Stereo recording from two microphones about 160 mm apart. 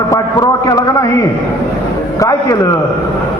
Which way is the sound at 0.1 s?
20° left (ahead or behind).